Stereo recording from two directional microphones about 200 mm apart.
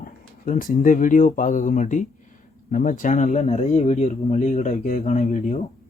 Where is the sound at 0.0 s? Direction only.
45° left (ahead or behind).